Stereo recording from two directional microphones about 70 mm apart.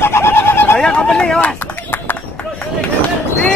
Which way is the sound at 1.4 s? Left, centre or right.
Left.